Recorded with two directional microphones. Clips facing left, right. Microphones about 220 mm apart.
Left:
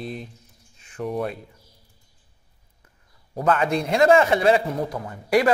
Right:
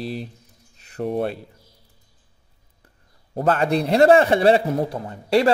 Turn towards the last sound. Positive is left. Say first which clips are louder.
# right 2 dB
turn(degrees=-25)  # may be behind; listen again after turning